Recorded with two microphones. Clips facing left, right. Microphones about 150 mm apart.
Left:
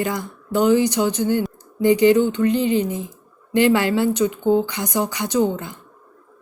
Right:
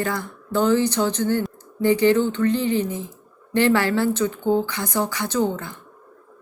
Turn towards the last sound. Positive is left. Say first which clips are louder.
# left 3 dB
turn(degrees=15)  # may be behind; listen again after turning